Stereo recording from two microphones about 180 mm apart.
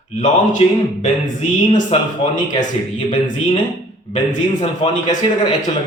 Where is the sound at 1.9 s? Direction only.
35° left (ahead or behind).